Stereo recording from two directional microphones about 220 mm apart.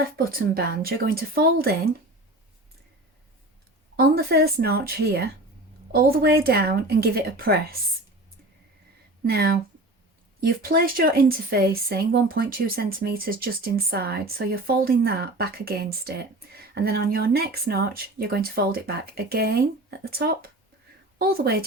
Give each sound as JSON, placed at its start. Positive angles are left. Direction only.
{"t": 0.2, "sound": "speech", "side_deg": -45}
{"t": 3.9, "sound": "speech", "side_deg": -45}
{"t": 9.2, "sound": "a woman's voice", "side_deg": -45}